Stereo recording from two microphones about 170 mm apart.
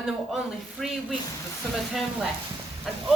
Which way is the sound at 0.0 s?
Centre (ahead or behind).